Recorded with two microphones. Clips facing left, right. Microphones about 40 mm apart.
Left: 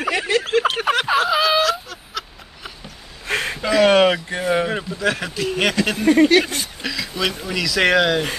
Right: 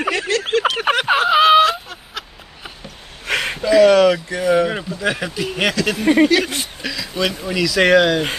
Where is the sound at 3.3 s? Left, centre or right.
Right.